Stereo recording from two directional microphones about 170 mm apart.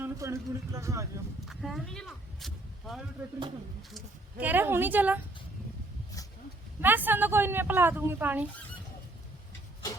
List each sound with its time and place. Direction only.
0.0 s speech: 15° right (ahead or behind)
1.5 s speech: centre (ahead or behind)
6.8 s speech: 10° right (ahead or behind)